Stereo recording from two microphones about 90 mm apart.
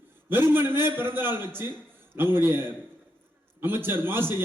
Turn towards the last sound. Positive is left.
turn(degrees=-25)  # may be behind; listen again after turning